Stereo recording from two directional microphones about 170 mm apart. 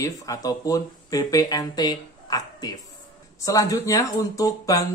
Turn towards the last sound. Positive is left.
turn(degrees=20)  # may be behind; listen again after turning